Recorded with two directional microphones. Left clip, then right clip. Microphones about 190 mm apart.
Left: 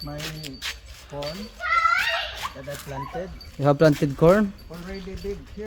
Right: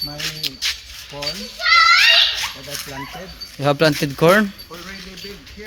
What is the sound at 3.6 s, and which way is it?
Speech, 10° left (ahead or behind).